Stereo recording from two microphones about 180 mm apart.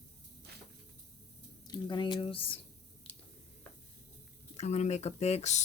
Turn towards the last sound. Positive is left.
turn(degrees=40)  # may be behind; listen again after turning